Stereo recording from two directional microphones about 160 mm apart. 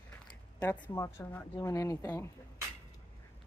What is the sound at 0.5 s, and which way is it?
Speech, 10° left (ahead or behind).